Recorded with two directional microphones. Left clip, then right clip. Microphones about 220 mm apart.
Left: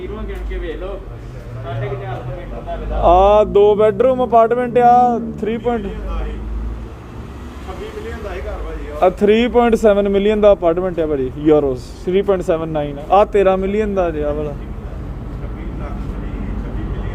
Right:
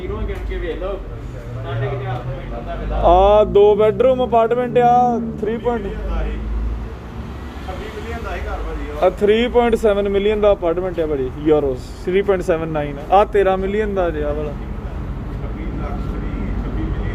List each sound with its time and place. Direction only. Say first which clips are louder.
3.0 s a man's voice: left 1 dB; 15° left (ahead or behind)
9.0 s a man's voice: left 2 dB; 25° left (ahead or behind)